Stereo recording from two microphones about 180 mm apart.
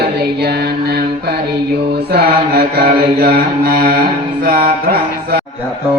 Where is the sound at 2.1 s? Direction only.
60° right (ahead or behind).